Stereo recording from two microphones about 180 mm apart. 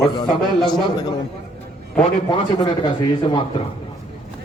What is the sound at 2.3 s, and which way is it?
Speech, 25° left (ahead or behind).